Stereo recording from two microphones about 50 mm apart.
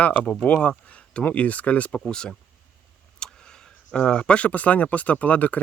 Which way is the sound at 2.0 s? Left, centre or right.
Centre.